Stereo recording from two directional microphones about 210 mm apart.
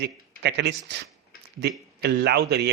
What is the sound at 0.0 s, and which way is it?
Speech, 55° right (ahead or behind).